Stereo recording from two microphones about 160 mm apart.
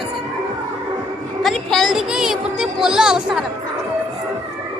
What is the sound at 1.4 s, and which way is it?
Speech, centre (ahead or behind).